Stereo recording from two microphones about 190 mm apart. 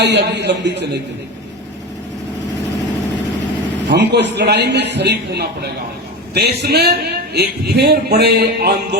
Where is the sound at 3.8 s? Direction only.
65° right (ahead or behind).